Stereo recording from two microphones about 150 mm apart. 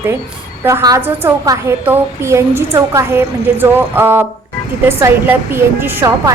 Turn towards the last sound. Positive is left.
turn(degrees=-15)  # may be behind; listen again after turning